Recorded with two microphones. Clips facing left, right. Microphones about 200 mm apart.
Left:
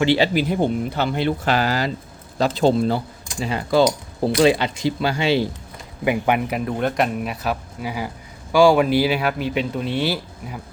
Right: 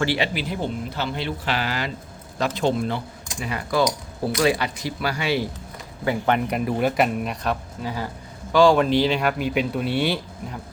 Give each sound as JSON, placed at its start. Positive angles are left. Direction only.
{"t": 0.2, "sound": "speech", "side_deg": 50}
{"t": 6.1, "sound": "speech", "side_deg": 10}
{"t": 6.7, "sound": "speech", "side_deg": -5}